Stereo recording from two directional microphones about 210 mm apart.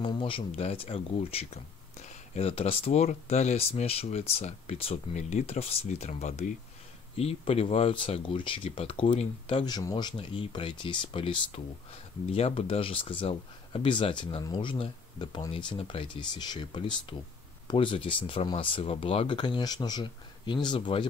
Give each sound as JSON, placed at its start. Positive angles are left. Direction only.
{"t": 0.0, "sound": "speech", "side_deg": 25}